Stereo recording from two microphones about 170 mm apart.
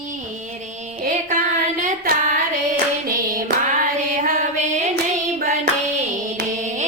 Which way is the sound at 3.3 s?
50° right (ahead or behind).